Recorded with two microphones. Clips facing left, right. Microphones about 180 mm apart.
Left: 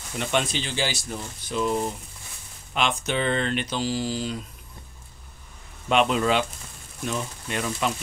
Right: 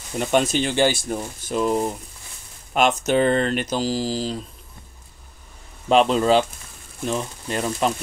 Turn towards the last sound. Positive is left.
turn(degrees=-35)  # may be behind; listen again after turning